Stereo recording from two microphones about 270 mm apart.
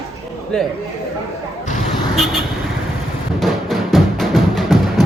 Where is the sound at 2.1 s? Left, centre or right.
Centre.